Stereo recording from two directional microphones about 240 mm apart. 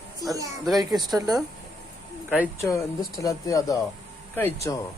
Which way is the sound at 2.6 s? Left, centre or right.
Centre.